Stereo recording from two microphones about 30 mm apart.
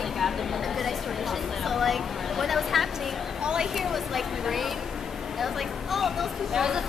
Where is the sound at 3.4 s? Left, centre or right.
Right.